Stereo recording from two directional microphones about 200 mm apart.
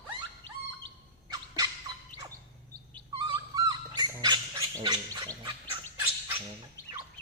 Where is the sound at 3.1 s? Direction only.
20° right (ahead or behind).